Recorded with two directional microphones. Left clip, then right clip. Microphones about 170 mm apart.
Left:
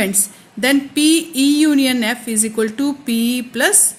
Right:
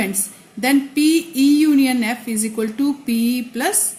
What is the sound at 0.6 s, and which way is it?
Speech, 40° left (ahead or behind).